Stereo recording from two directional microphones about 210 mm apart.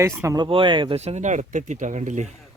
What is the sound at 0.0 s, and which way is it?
Speech, 15° right (ahead or behind).